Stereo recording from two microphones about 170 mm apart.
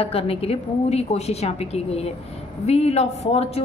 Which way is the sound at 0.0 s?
35° left (ahead or behind).